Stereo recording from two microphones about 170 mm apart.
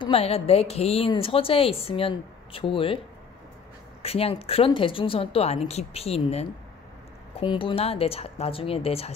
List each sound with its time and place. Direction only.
0.0 s a woman's voice: 35° left (ahead or behind)
4.0 s a woman's voice: 35° left (ahead or behind)